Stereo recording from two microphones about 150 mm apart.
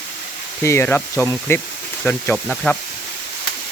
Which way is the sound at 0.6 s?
15° left (ahead or behind).